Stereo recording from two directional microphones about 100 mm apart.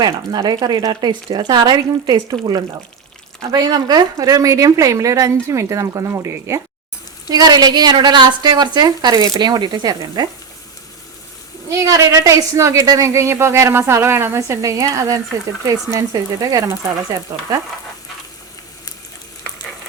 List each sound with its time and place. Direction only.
0.0 s a woman's voice: 45° right (ahead or behind); by 6.6 s 30° right (ahead or behind)
7.3 s a woman's voice: 40° right (ahead or behind)
11.7 s a woman's voice: 30° right (ahead or behind)